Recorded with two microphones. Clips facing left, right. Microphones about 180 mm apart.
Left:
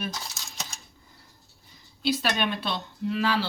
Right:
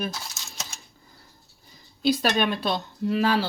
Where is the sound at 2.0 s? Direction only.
40° right (ahead or behind).